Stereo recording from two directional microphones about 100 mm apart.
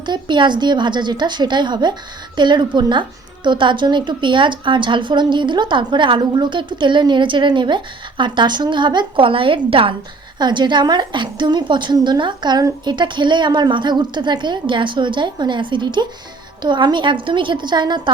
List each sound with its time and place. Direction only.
0.0 s a woman's voice: 50° right (ahead or behind); by 9.9 s 65° right (ahead or behind)
10.3 s a woman's voice: 45° right (ahead or behind)